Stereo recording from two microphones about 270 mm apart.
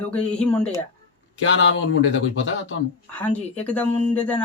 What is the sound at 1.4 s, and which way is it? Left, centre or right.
Speech, left.